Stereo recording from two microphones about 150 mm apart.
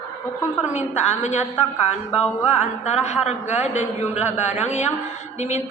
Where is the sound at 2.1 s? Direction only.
10° right (ahead or behind).